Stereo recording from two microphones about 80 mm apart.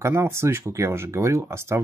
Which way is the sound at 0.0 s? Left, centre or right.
Right.